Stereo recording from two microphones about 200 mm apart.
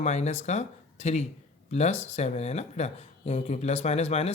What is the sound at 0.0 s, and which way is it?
Speech, 35° left (ahead or behind).